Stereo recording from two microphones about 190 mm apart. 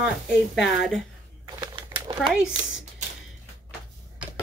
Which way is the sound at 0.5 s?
Centre (ahead or behind).